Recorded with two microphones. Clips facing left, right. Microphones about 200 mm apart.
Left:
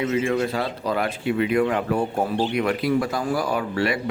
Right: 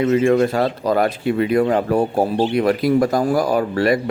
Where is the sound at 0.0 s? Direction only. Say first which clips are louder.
Right 7 dB; 50° right (ahead or behind).